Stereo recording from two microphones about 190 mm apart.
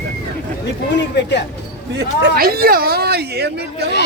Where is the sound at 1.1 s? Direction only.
65° left (ahead or behind).